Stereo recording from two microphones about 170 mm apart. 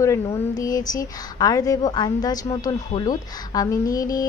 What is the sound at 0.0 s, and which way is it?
Speech, 15° left (ahead or behind).